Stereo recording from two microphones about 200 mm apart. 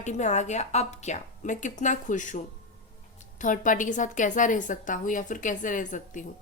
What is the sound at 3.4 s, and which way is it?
A woman's voice, 40° left (ahead or behind).